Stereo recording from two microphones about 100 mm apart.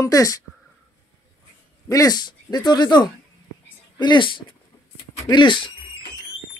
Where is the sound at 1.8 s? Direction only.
40° left (ahead or behind); by 5.7 s 55° left (ahead or behind).